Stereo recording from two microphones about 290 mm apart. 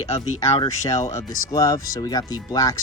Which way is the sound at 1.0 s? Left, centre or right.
Left.